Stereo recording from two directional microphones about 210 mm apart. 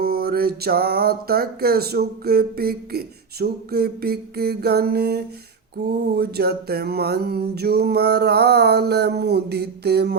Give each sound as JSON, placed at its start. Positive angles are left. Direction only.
{"t": 0.0, "sound": "music", "side_deg": -50}